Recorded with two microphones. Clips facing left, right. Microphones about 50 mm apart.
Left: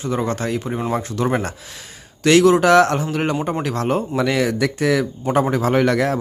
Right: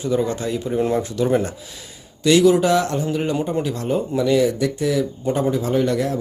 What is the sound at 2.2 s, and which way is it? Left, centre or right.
Speech, left.